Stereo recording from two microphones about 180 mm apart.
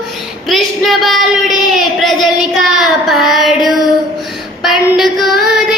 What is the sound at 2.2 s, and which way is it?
Child singing, centre (ahead or behind).